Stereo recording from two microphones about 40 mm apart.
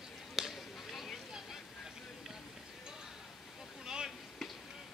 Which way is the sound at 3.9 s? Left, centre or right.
Centre.